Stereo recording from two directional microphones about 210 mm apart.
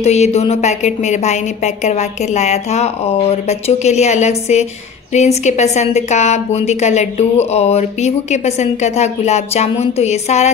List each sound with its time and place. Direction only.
0.0 s a woman's voice: 30° left (ahead or behind)